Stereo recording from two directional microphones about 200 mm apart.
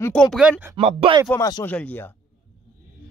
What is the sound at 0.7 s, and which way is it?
Speech, 25° right (ahead or behind).